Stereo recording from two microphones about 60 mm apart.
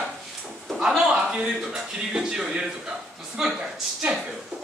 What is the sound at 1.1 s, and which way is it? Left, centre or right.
A man's voice, centre.